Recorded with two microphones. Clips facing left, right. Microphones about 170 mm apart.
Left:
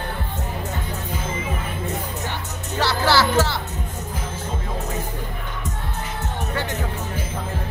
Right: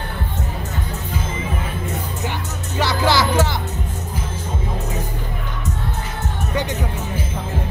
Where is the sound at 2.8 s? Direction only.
15° right (ahead or behind).